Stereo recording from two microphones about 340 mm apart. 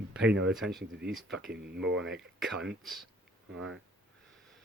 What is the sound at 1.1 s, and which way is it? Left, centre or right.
Speech, centre.